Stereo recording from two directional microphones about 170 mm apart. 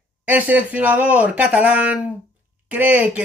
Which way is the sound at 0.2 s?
10° right (ahead or behind).